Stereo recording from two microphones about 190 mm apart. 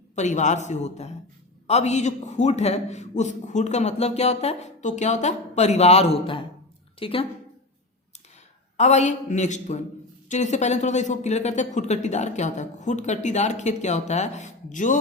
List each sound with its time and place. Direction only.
0.2 s a man's voice: 40° left (ahead or behind)
8.8 s a man's voice: 35° left (ahead or behind)